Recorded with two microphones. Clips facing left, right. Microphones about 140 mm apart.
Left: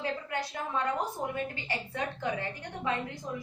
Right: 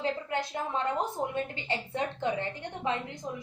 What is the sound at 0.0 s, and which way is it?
A woman's voice, 25° right (ahead or behind).